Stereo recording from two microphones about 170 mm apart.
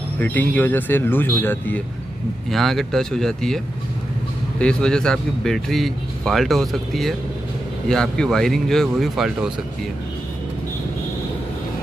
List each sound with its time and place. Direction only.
0.2 s speech: 10° left (ahead or behind)
2.5 s a man's voice: centre (ahead or behind)